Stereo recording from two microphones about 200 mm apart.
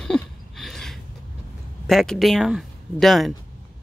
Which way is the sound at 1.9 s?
Centre (ahead or behind).